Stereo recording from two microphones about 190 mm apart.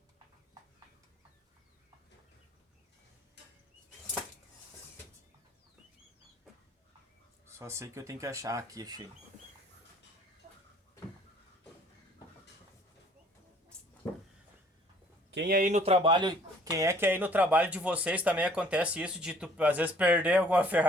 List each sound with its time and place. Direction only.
7.4 s speech: 15° right (ahead or behind)
15.3 s speech: 60° right (ahead or behind); by 20.8 s 10° right (ahead or behind)